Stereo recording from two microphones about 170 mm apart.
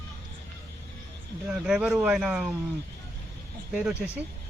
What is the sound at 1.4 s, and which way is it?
Speech, 5° right (ahead or behind).